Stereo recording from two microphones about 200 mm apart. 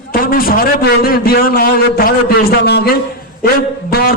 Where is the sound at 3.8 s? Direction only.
50° left (ahead or behind).